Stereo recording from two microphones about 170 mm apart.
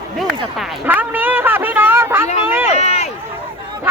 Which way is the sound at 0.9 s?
10° right (ahead or behind).